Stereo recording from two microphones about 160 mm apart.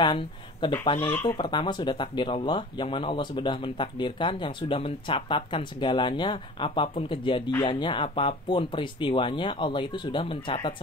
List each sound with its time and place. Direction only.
0.0 s speech: 30° left (ahead or behind)